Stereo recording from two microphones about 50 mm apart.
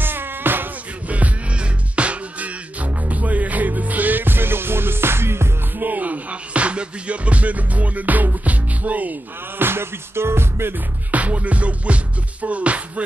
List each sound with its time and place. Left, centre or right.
0.0 s music: right
1.0 s music: right
5.8 s music: right
9.6 s music: right
11.1 s music: right